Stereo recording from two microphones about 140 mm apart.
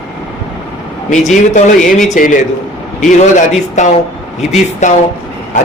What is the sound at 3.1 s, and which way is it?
Speech, 60° left (ahead or behind).